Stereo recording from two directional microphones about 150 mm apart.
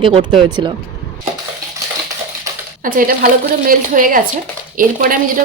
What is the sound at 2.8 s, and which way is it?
Speech, 65° right (ahead or behind).